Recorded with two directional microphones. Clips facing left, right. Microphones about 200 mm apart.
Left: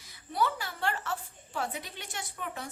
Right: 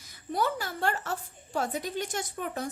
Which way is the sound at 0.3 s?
45° right (ahead or behind).